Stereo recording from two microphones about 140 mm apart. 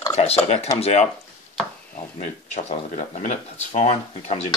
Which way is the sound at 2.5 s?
55° left (ahead or behind).